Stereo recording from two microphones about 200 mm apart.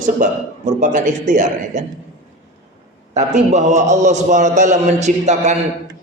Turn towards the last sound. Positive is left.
turn(degrees=-35)  # may be behind; listen again after turning